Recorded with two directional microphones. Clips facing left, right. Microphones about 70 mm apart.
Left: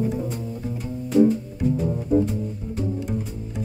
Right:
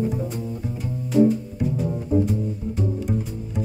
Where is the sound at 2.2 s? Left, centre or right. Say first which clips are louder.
Right 3 dB; centre.